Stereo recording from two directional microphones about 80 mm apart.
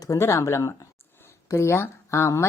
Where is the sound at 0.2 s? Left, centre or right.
Left.